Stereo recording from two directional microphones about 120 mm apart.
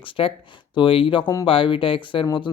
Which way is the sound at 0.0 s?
50° left (ahead or behind).